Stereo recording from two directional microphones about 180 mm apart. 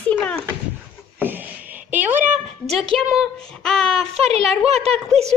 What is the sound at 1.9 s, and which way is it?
A woman's voice, 10° right (ahead or behind).